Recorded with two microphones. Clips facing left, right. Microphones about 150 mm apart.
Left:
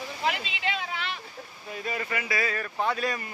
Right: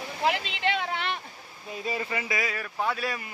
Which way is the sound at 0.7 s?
60° right (ahead or behind).